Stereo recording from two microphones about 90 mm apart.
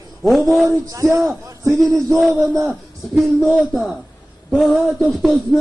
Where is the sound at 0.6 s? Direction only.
35° right (ahead or behind).